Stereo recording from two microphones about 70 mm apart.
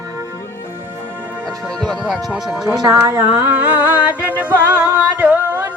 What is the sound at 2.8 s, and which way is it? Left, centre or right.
Speech, right.